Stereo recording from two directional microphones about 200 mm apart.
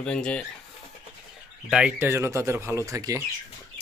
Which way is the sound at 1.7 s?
5° right (ahead or behind).